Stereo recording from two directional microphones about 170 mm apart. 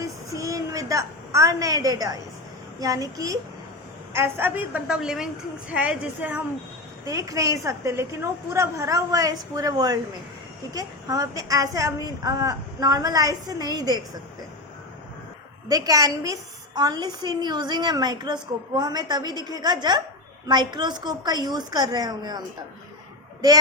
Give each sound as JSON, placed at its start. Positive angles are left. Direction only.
{"t": 0.0, "sound": "a sound", "side_deg": -20}
{"t": 2.8, "sound": "a woman's voice", "side_deg": -20}
{"t": 7.0, "sound": "a woman's voice", "side_deg": -20}
{"t": 15.7, "sound": "a woman's voice", "side_deg": -20}
{"t": 23.4, "sound": "a woman's voice", "side_deg": -20}